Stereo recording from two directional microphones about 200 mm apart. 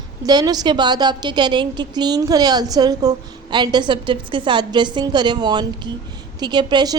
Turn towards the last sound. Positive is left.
turn(degrees=-20)  # may be behind; listen again after turning